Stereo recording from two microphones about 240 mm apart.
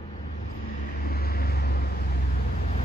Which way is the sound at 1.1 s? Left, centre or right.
Left.